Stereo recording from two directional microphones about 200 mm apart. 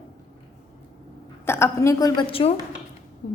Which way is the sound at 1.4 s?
15° left (ahead or behind).